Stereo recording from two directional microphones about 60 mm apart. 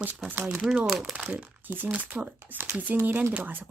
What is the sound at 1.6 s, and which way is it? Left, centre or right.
Speech, right.